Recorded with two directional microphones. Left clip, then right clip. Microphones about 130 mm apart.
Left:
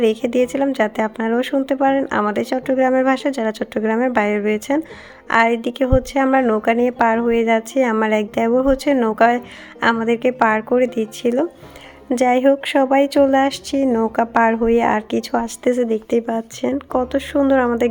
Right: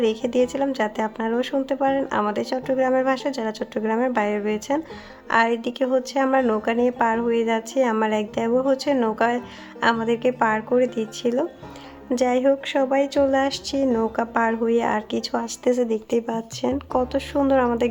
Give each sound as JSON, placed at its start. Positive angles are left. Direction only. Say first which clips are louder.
{"t": 0.0, "sound": "a woman's voice", "louder": "left 4 dB", "side_deg": 30}